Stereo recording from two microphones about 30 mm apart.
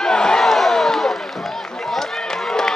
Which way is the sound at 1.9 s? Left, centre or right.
Centre.